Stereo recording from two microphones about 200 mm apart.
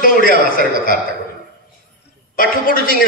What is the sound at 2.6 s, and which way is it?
Speech, 45° left (ahead or behind).